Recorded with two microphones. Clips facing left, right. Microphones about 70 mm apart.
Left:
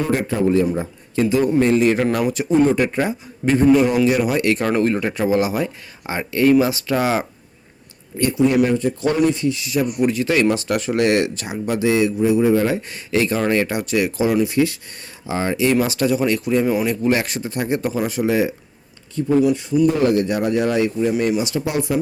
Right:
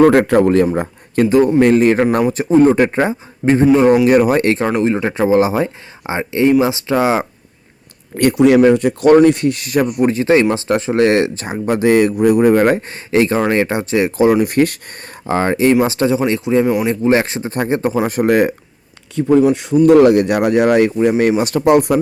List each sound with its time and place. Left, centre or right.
0.0 s a man's voice: right
4.0 s speech: right
4.6 s speech: centre
8.1 s speech: right
10.0 s speech: right
12.1 s speech: right
12.9 s speech: right
14.4 s speech: right
15.3 s speech: right
18.2 s speech: right
19.2 s speech: right